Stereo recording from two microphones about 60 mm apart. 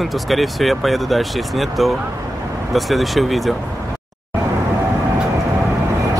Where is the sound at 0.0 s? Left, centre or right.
Centre.